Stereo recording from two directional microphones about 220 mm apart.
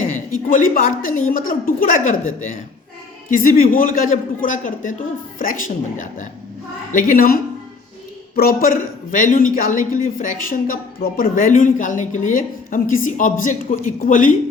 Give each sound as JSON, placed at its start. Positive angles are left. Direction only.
{"t": 0.3, "sound": "a woman's voice", "side_deg": 40}
{"t": 8.4, "sound": "a woman's voice", "side_deg": 40}